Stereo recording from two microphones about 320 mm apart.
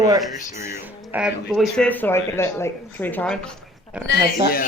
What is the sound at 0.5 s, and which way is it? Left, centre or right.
Speech, centre.